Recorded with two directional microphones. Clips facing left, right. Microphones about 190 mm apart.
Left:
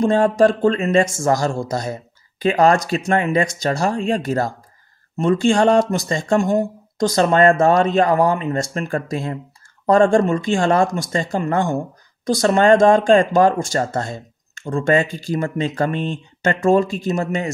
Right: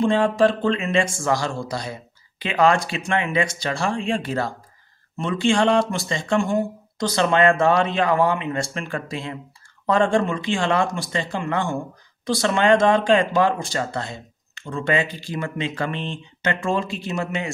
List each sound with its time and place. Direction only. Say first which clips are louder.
0.0 s speech: left 3 dB; 45° left (ahead or behind)